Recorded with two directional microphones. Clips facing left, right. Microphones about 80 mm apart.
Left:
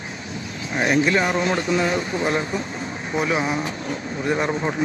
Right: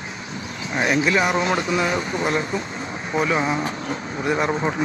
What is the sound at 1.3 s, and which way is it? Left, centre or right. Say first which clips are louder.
Speech: even; right.